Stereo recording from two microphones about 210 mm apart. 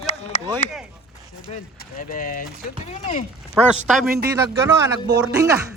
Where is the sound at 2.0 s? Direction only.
40° left (ahead or behind).